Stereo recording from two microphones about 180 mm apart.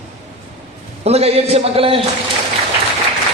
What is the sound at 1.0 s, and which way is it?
A man's voice, 35° right (ahead or behind).